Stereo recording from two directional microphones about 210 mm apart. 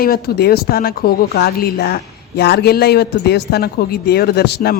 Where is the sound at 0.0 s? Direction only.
45° left (ahead or behind).